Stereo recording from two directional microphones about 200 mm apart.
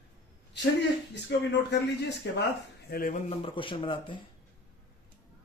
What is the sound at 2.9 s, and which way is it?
Speech, 45° left (ahead or behind).